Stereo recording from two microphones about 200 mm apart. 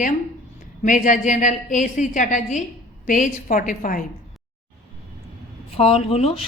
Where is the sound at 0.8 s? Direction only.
40° left (ahead or behind).